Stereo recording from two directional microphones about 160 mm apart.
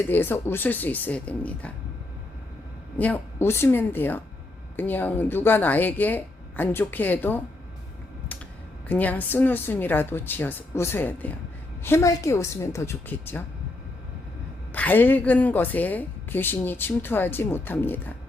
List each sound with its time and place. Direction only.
0.1 s a woman's voice: 15° left (ahead or behind)
3.0 s a woman's voice: 10° left (ahead or behind)
8.9 s a woman's voice: 10° left (ahead or behind)
14.7 s a woman's voice: 10° left (ahead or behind)